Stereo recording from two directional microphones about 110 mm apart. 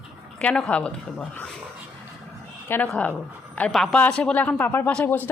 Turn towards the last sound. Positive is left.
turn(degrees=15)  # may be behind; listen again after turning